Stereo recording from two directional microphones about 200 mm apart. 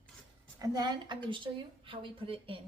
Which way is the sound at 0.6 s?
20° right (ahead or behind).